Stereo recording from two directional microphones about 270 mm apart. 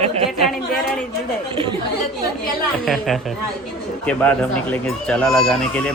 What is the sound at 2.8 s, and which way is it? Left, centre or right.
Speech, centre.